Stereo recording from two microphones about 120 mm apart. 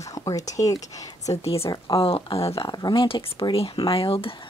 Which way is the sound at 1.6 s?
30° left (ahead or behind).